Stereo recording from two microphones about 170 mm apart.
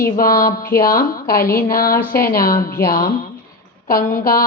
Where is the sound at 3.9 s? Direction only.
55° left (ahead or behind).